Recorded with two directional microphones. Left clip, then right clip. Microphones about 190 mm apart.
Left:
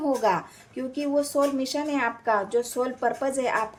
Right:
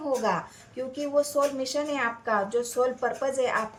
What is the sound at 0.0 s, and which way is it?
A woman's voice, 40° left (ahead or behind).